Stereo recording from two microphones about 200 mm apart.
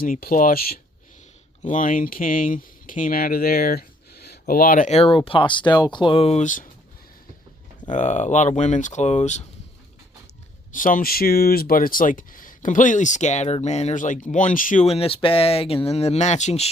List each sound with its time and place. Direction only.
0.0 s speech: 45° left (ahead or behind)
7.9 s speech: 35° left (ahead or behind)
10.7 s speech: 40° left (ahead or behind)